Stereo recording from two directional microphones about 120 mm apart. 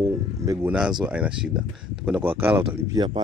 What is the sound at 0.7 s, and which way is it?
Speech, 5° right (ahead or behind).